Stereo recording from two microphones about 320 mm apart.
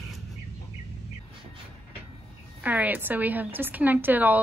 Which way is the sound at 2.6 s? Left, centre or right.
Centre.